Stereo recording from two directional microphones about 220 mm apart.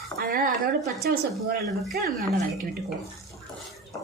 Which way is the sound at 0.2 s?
40° right (ahead or behind).